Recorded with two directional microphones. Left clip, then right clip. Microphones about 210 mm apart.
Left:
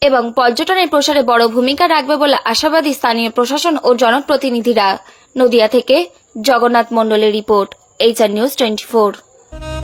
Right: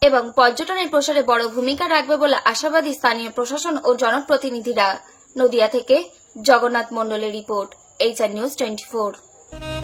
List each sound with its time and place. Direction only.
0.0 s speech: 35° left (ahead or behind)